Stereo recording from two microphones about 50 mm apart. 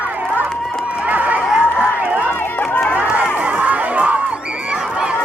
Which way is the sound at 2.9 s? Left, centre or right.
Right.